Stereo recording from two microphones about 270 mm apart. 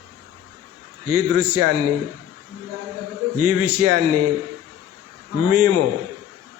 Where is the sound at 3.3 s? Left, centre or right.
Right.